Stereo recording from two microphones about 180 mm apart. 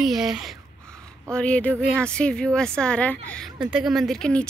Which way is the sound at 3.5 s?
5° right (ahead or behind).